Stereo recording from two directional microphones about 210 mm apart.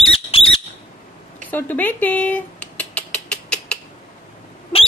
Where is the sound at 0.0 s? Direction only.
25° left (ahead or behind).